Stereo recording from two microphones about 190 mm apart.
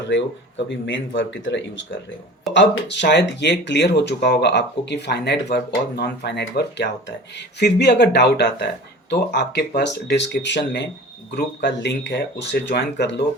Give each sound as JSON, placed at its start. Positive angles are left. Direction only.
{"t": 0.9, "sound": "speech", "side_deg": 80}
{"t": 2.5, "sound": "speech", "side_deg": 65}